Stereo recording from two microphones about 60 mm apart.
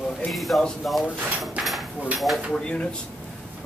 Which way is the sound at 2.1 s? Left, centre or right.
Centre.